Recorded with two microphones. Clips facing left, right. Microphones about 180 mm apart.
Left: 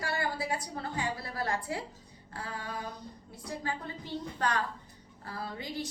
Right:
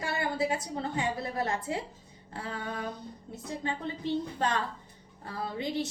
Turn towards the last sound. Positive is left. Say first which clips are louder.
# right 5 dB
turn(degrees=-25)  # may be behind; listen again after turning